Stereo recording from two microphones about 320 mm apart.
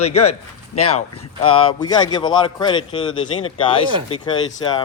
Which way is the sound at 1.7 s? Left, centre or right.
Centre.